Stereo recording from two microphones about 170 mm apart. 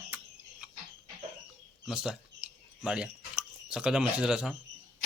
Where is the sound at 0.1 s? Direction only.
10° right (ahead or behind).